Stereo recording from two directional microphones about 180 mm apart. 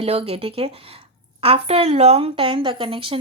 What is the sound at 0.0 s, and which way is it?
A woman's voice, 30° right (ahead or behind).